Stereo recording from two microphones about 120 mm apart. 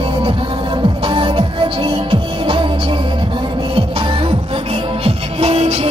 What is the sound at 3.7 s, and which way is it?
Music, 50° right (ahead or behind).